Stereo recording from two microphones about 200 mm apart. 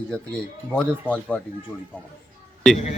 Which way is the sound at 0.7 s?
5° left (ahead or behind).